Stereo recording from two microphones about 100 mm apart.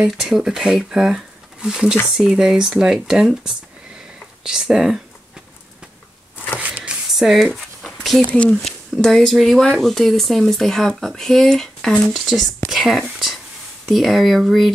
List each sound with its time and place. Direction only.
0.2 s speech: 5° right (ahead or behind)
6.6 s a sound: 15° right (ahead or behind)
8.3 s speech: 15° left (ahead or behind)
12.6 s whispering: centre (ahead or behind)
13.8 s speech: centre (ahead or behind)